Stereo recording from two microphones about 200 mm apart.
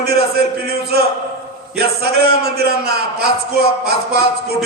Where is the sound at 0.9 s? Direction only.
50° right (ahead or behind).